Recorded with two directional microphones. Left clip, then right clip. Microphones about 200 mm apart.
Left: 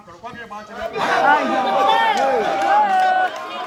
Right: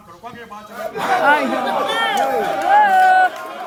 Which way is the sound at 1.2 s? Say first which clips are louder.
Even; 45° right (ahead or behind).